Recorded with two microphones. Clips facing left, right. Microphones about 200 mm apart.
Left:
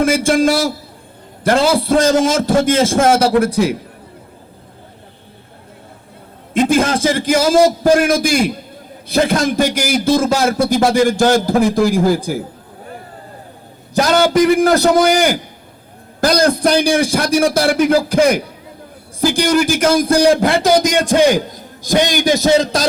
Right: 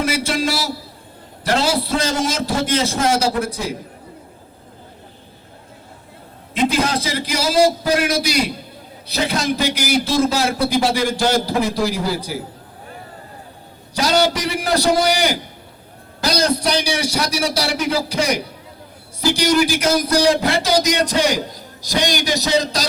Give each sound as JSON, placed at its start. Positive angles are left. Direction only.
{"t": 0.0, "sound": "a sound", "side_deg": 50}
{"t": 1.5, "sound": "a man's voice", "side_deg": 50}
{"t": 6.5, "sound": "a man's voice", "side_deg": 50}
{"t": 13.9, "sound": "a man's voice", "side_deg": 50}